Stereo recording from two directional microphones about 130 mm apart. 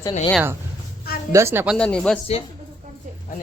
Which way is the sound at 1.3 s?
20° right (ahead or behind).